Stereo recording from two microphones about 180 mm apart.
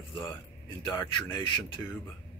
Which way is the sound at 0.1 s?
25° left (ahead or behind).